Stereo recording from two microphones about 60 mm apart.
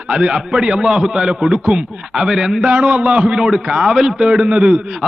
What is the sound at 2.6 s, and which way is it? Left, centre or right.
A man's voice, centre.